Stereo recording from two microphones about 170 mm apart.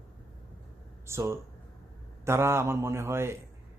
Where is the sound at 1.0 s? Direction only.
15° right (ahead or behind).